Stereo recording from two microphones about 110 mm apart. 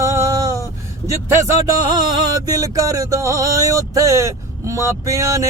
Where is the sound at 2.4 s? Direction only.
30° right (ahead or behind).